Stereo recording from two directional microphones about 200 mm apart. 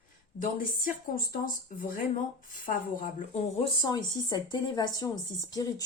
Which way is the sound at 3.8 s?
20° left (ahead or behind).